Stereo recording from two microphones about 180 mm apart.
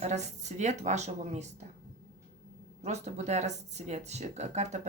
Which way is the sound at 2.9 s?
40° right (ahead or behind).